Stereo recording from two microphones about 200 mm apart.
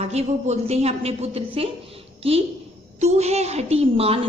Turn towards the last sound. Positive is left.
turn(degrees=-30)  # may be behind; listen again after turning